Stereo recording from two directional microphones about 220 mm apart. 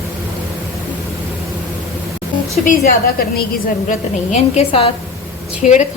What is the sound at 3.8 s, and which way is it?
A woman's voice, 30° left (ahead or behind).